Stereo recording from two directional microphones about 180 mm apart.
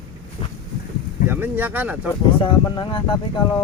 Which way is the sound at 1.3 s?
10° right (ahead or behind).